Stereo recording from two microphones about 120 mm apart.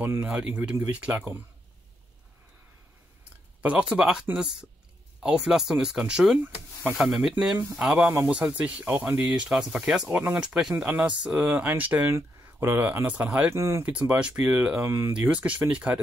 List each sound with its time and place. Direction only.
0.0 s speech: 15° right (ahead or behind)
3.6 s speech: 10° right (ahead or behind)
8.1 s speech: 20° right (ahead or behind)
13.5 s speech: 25° right (ahead or behind)
13.8 s speech: 10° right (ahead or behind)
14.9 s speech: 20° right (ahead or behind)
15.1 s speech: 10° right (ahead or behind)